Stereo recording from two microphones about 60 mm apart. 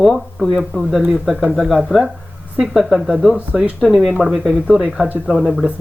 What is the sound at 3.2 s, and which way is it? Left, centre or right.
Speech, centre.